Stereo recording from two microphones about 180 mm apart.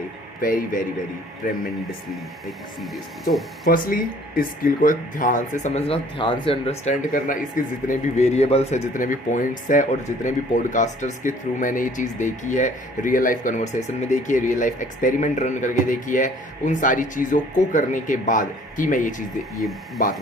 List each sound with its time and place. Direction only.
0.4 s speech: 50° left (ahead or behind)
3.7 s speech: 50° left (ahead or behind)